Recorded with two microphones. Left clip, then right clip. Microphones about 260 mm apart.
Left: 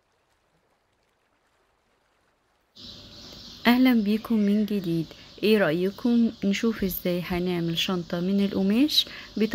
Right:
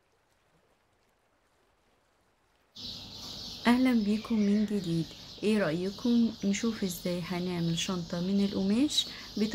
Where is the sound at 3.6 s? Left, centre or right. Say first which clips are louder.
Left 6 dB; centre.